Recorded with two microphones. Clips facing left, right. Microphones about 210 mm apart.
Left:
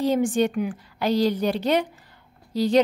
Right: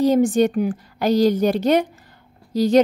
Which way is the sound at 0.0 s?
40° right (ahead or behind).